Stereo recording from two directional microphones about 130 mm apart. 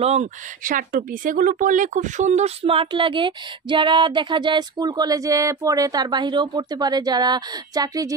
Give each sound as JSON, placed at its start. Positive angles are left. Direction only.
{"t": 0.0, "sound": "speech", "side_deg": -60}
{"t": 2.6, "sound": "speech", "side_deg": -45}